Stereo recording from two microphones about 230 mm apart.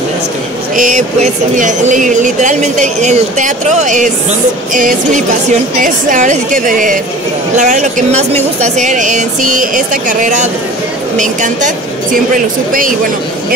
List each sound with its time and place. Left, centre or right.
0.7 s speech: right